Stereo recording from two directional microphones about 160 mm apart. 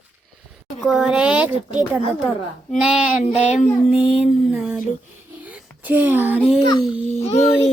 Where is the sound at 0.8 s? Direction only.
5° right (ahead or behind).